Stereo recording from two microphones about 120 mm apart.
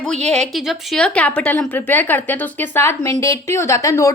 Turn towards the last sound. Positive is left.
turn(degrees=25)  # may be behind; listen again after turning